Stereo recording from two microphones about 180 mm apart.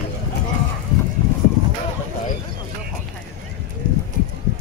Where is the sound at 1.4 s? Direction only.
45° left (ahead or behind).